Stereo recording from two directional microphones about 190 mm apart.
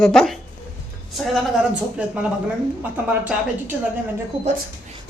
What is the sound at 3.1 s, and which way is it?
Speech, 10° right (ahead or behind).